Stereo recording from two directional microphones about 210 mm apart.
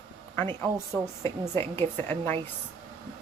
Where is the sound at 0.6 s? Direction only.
15° right (ahead or behind).